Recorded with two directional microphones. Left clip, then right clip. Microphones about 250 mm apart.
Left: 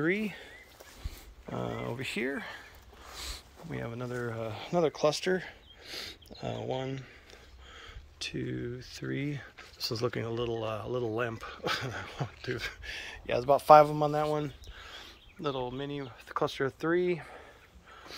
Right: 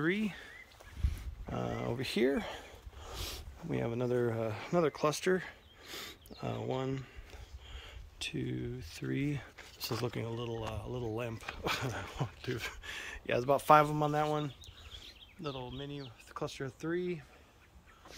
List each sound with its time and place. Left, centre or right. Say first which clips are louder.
0.0 s speech: left 3 dB; centre
1.5 s speech: left 1 dB; centre
16.3 s speech: left 10 dB; centre